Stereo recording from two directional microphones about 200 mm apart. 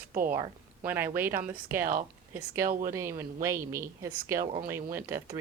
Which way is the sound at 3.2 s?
15° right (ahead or behind).